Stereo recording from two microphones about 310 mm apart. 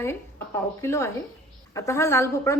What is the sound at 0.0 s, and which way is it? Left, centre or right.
A woman's voice, centre.